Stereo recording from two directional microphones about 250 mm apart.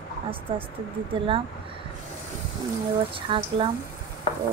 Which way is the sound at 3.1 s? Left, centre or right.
Right.